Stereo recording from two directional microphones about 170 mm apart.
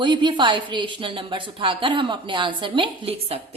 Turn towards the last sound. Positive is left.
turn(degrees=-30)  # may be behind; listen again after turning